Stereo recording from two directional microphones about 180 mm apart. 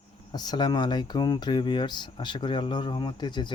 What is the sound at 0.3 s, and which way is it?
Speech, 25° left (ahead or behind).